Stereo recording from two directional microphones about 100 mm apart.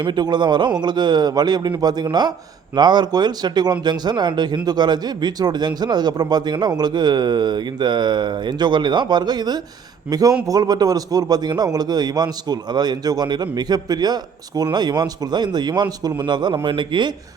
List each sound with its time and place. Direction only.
0.0 s speech: 50° right (ahead or behind)